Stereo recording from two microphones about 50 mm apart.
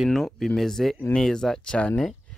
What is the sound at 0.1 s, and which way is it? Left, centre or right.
Speech, centre.